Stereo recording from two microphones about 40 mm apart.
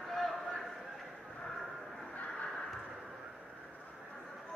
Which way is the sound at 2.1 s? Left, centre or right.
Left.